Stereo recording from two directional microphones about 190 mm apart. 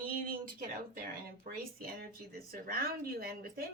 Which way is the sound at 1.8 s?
55° right (ahead or behind).